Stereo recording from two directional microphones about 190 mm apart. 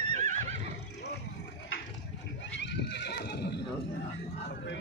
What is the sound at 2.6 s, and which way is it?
Neigh, 65° left (ahead or behind).